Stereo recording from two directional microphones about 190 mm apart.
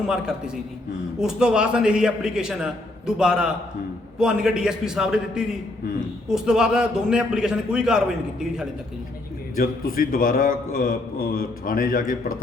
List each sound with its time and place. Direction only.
0.1 s a man's voice: 5° right (ahead or behind)
9.6 s a man's voice: 50° left (ahead or behind)